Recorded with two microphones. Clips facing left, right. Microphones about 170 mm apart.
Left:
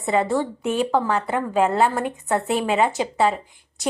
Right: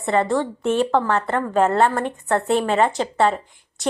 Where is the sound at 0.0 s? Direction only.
Centre (ahead or behind).